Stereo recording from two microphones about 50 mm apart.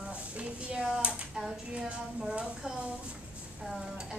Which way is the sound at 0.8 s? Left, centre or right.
Centre.